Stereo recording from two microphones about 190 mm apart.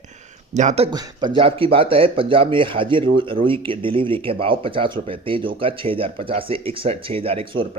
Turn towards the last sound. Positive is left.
turn(degrees=-25)  # may be behind; listen again after turning